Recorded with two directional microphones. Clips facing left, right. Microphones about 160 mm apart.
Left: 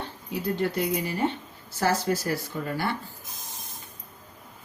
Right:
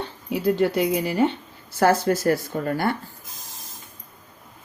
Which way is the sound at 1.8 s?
55° right (ahead or behind).